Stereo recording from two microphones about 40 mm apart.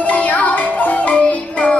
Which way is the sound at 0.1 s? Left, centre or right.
Left.